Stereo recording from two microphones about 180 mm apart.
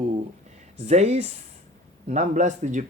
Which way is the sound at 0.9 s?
35° right (ahead or behind).